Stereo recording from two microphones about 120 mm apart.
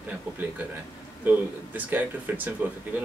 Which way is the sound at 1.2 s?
15° right (ahead or behind).